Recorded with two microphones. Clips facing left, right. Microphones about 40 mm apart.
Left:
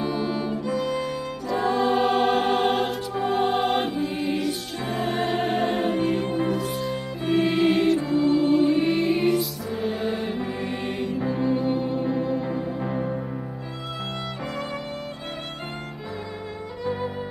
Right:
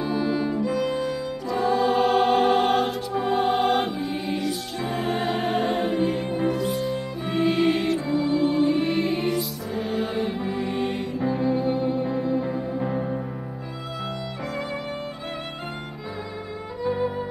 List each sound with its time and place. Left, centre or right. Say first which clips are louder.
0.0 s music: right 2 dB; centre
1.6 s music: right 1 dB; centre
2.0 s music: right 1 dB; centre